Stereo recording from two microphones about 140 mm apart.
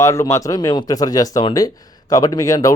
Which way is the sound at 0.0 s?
20° left (ahead or behind).